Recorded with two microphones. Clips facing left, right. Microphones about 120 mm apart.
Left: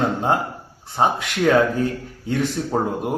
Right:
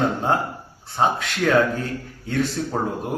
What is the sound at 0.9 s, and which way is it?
A man's voice, 15° left (ahead or behind).